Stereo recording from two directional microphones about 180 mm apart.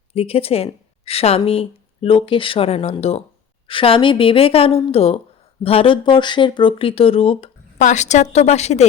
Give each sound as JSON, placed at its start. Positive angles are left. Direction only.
{"t": 0.1, "sound": "speech", "side_deg": 35}